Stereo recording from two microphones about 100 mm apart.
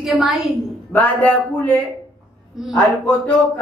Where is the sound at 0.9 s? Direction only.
15° left (ahead or behind).